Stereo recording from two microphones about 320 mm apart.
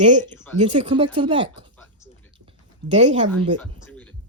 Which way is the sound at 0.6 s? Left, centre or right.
Centre.